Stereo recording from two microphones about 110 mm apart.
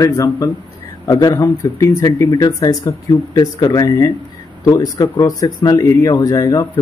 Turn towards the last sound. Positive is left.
turn(degrees=30)  # may be behind; listen again after turning